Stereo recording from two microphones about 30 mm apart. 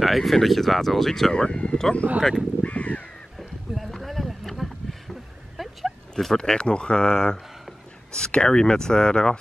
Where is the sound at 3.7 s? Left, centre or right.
Centre.